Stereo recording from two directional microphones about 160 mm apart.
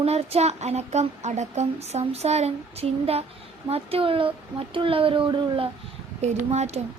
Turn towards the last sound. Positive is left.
turn(degrees=-45)  # may be behind; listen again after turning